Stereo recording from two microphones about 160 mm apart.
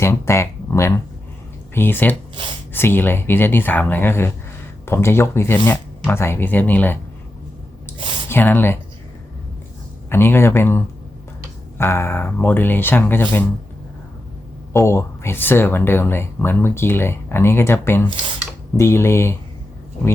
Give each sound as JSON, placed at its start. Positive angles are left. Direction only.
{"t": 0.0, "sound": "speech", "side_deg": 15}
{"t": 7.9, "sound": "a sound", "side_deg": -30}
{"t": 8.3, "sound": "speech", "side_deg": 10}
{"t": 10.1, "sound": "speech", "side_deg": 15}
{"t": 14.7, "sound": "speech", "side_deg": 15}